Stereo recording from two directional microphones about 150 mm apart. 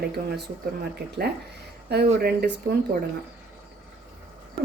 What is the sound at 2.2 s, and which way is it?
Speech, 90° right.